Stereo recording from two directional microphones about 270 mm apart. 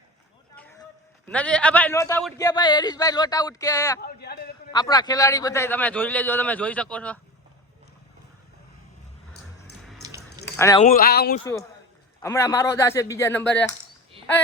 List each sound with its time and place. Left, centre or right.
0.5 s run: centre
1.3 s a man's voice: centre
4.0 s a sound: left
4.7 s a man's voice: centre
10.0 s a sound: centre
10.4 s keys jangling: centre
10.8 s speech: left
12.2 s a man's voice: centre